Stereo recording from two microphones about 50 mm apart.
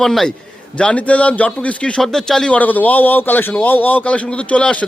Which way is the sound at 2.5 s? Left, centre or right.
Left.